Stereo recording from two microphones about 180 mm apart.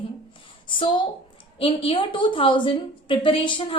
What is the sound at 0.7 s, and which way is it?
A woman's voice, 25° left (ahead or behind).